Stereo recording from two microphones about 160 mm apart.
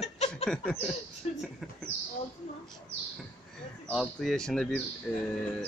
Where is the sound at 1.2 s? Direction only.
45° left (ahead or behind).